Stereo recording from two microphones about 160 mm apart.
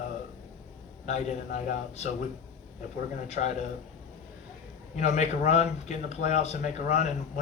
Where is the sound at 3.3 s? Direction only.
45° left (ahead or behind).